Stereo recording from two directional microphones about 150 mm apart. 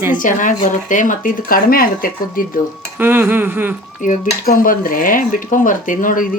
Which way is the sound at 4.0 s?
65° left (ahead or behind).